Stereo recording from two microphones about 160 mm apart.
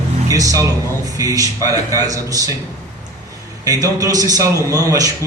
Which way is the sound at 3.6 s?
20° right (ahead or behind).